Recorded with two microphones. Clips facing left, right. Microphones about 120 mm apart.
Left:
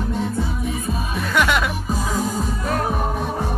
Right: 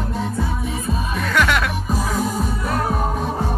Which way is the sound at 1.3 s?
10° left (ahead or behind).